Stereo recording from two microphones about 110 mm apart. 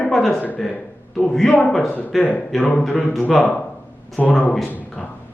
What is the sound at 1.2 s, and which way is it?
Speech, 5° left (ahead or behind).